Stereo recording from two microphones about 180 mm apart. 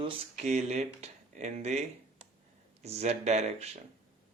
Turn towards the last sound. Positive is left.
turn(degrees=-35)  # may be behind; listen again after turning